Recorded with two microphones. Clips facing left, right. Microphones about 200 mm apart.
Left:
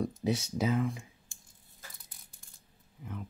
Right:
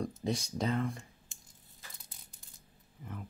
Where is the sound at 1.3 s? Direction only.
20° right (ahead or behind).